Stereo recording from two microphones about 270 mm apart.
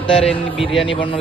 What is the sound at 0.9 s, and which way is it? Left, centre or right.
Speech, centre.